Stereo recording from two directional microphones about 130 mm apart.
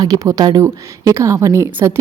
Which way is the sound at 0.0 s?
25° right (ahead or behind).